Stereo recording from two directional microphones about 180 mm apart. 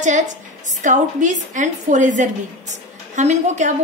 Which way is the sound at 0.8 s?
45° right (ahead or behind).